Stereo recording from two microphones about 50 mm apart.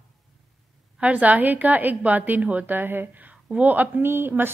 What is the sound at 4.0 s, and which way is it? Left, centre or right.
Speech, right.